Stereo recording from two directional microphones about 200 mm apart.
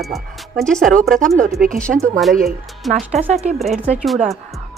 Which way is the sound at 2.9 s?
40° right (ahead or behind).